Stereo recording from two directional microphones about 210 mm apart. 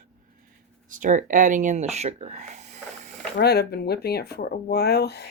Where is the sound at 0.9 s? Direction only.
40° right (ahead or behind).